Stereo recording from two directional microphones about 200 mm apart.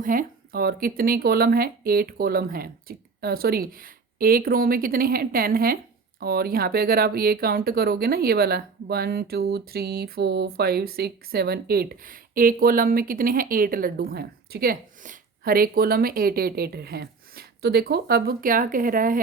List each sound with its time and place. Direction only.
0.0 s speech: 45° right (ahead or behind)